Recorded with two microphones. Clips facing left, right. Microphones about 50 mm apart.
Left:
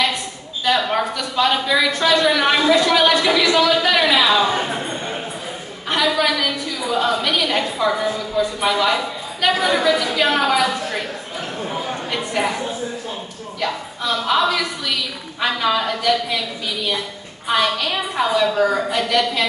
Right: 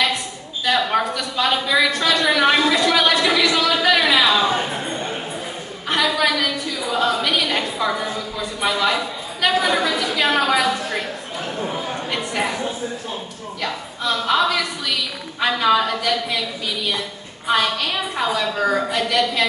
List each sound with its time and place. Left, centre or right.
0.7 s a woman's voice: centre
5.9 s a woman's voice: centre
11.7 s a sound: centre
13.6 s a woman's voice: centre